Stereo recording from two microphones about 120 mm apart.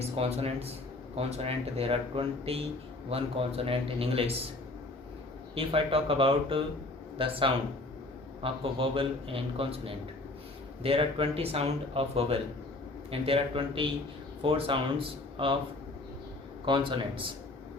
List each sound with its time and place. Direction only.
0.0 s a man's voice: 60° right (ahead or behind)
5.5 s a man's voice: 50° right (ahead or behind)
16.6 s speech: 40° right (ahead or behind)